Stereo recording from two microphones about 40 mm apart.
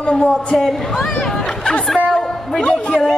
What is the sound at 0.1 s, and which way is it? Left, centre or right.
Speech, centre.